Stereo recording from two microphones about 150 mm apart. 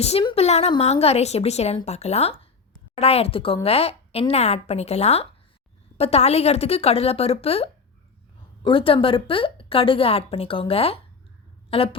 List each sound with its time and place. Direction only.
0.0 s a woman's voice: 45° left (ahead or behind)